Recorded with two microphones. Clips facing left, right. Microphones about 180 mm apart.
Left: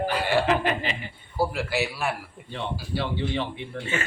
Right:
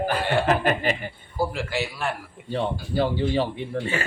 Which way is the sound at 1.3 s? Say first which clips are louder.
Left 1 dB; 5° left (ahead or behind).